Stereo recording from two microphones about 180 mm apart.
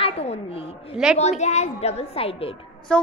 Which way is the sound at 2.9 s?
5° left (ahead or behind).